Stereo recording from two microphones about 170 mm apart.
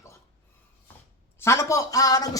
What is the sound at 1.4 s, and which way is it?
Speech, 15° left (ahead or behind).